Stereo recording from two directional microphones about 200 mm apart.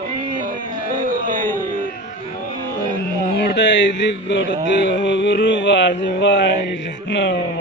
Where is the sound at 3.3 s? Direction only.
60° left (ahead or behind).